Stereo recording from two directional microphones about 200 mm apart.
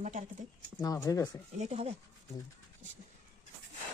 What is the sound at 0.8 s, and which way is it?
Speech, 15° left (ahead or behind).